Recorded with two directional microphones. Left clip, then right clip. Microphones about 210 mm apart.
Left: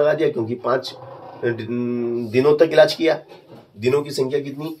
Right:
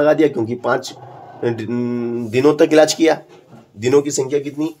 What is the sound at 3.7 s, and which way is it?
Speech, 45° right (ahead or behind).